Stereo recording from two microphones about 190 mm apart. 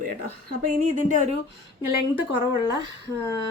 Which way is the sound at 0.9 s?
40° right (ahead or behind).